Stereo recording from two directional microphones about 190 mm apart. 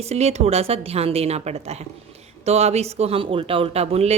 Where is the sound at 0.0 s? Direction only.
35° right (ahead or behind).